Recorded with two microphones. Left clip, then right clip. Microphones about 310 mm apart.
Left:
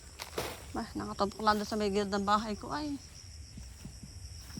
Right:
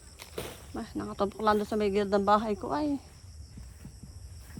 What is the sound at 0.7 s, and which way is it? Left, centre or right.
Speech, centre.